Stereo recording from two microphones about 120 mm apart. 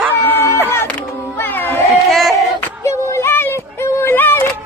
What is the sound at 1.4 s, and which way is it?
Cat, 20° left (ahead or behind).